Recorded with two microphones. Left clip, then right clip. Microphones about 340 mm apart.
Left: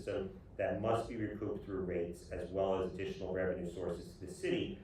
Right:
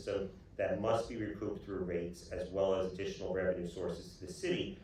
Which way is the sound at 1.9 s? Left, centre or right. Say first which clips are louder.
Even; centre.